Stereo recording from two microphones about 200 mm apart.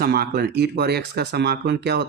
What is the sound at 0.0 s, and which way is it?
Speech, 50° right (ahead or behind).